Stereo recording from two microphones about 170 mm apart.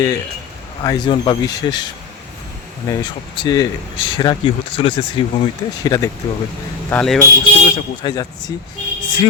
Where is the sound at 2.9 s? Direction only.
25° left (ahead or behind).